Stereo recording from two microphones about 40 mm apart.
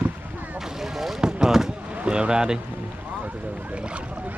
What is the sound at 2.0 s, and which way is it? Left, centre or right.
Speech, right.